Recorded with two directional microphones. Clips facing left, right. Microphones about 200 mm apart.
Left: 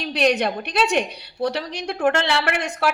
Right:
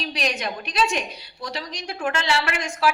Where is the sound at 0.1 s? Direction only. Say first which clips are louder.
Left 12 dB; 65° left (ahead or behind).